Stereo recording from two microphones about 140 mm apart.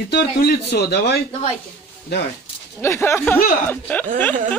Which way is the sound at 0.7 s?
90° left.